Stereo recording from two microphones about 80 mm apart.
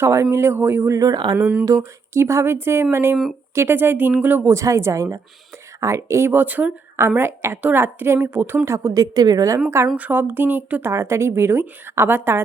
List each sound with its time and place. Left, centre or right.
0.0 s a woman's voice: right
0.9 s speech: right
1.6 s a woman's voice: right
4.5 s a woman's voice: right
9.6 s a woman's voice: right
9.9 s speech: right
10.9 s a woman's voice: right